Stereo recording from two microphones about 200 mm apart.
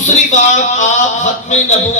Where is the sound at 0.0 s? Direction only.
35° left (ahead or behind).